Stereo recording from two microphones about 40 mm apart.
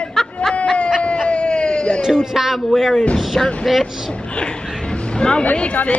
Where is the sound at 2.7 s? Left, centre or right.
Centre.